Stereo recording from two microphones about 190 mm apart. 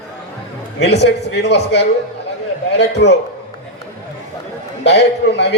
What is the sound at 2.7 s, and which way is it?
Speech, 65° left (ahead or behind).